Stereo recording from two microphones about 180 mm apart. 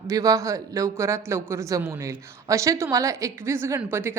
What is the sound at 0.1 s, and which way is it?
A woman's voice, 20° right (ahead or behind).